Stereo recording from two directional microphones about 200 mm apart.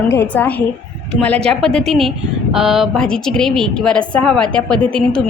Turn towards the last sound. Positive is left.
turn(degrees=5)  # may be behind; listen again after turning